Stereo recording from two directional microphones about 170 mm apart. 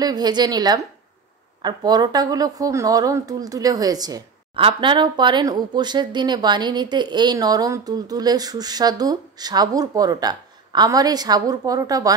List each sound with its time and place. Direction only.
0.0 s a woman's voice: 25° right (ahead or behind)